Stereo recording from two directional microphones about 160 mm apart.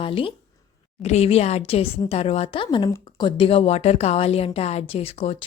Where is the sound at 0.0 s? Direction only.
35° left (ahead or behind).